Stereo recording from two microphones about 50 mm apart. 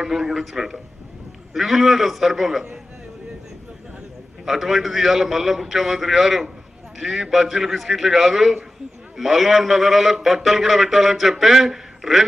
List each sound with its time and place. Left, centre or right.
0.0 s a man's voice: centre
4.5 s a man's voice: centre